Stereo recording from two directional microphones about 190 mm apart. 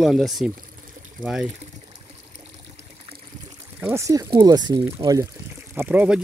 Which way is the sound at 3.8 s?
10° right (ahead or behind).